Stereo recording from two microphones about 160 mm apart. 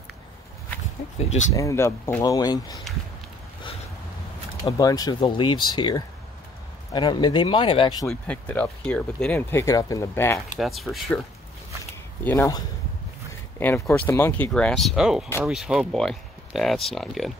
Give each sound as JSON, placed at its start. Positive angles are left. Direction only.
{"t": 1.5, "sound": "speech", "side_deg": 20}
{"t": 4.6, "sound": "speech", "side_deg": 25}
{"t": 8.1, "sound": "speech", "side_deg": 10}
{"t": 10.6, "sound": "speech", "side_deg": 0}
{"t": 12.3, "sound": "speech", "side_deg": 15}
{"t": 13.6, "sound": "speech", "side_deg": 15}
{"t": 14.5, "sound": "speech", "side_deg": 5}